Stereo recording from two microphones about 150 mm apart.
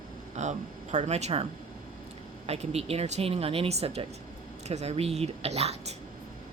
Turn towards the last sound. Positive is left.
turn(degrees=-45)  # may be behind; listen again after turning